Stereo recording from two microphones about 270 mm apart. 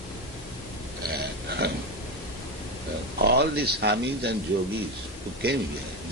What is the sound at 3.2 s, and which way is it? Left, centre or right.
A man's voice, right.